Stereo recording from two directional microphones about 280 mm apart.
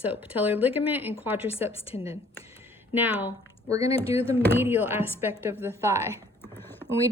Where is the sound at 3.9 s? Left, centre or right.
Centre.